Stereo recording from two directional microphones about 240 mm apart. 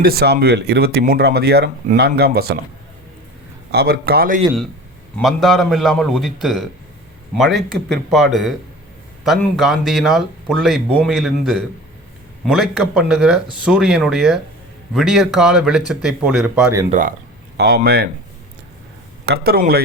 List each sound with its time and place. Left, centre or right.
0.0 s speech: right
3.7 s speech: right
5.1 s speech: centre
16.9 s speech: right
19.2 s speech: right